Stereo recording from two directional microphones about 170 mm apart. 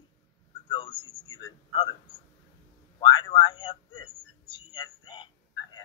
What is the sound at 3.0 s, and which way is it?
Speech, 25° left (ahead or behind).